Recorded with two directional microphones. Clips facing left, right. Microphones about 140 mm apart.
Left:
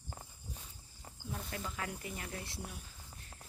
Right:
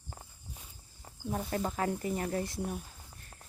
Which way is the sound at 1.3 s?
45° right (ahead or behind).